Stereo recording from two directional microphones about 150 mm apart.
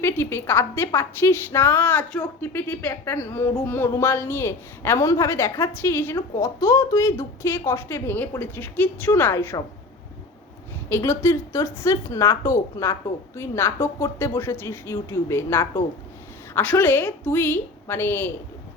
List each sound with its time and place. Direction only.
0.0 s speech: 15° left (ahead or behind)
10.8 s speech: 15° left (ahead or behind)